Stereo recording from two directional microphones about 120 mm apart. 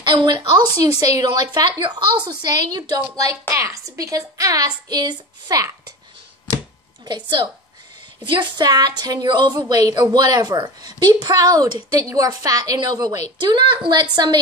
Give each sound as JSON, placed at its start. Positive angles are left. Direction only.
{"t": 0.0, "sound": "a woman's voice", "side_deg": -40}
{"t": 7.1, "sound": "a woman's voice", "side_deg": -40}